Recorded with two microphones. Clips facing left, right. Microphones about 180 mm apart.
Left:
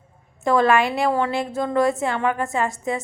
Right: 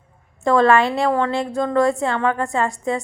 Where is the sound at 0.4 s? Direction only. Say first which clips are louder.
Right 3 dB; 20° left (ahead or behind).